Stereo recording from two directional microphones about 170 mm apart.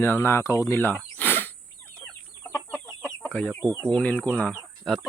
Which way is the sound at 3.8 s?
5° left (ahead or behind).